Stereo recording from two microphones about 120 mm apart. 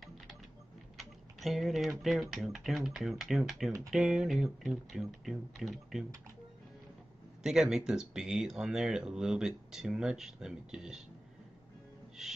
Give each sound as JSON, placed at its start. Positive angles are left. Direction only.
{"t": 0.9, "sound": "speech", "side_deg": 0}
{"t": 7.4, "sound": "speech", "side_deg": -5}
{"t": 12.2, "sound": "speech", "side_deg": -5}